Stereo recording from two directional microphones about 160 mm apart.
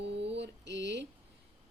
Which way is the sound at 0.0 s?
90° right.